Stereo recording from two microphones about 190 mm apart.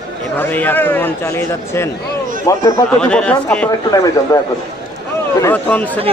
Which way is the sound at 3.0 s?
5° left (ahead or behind).